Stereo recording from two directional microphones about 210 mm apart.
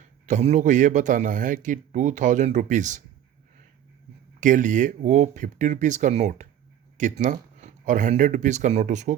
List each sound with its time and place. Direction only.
0.3 s a man's voice: 35° right (ahead or behind)
4.4 s a man's voice: 40° right (ahead or behind)